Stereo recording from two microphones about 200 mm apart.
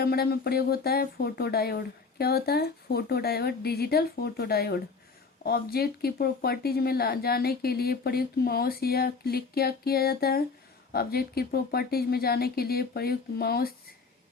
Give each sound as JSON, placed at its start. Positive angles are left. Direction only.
{"t": 0.0, "sound": "speech", "side_deg": 50}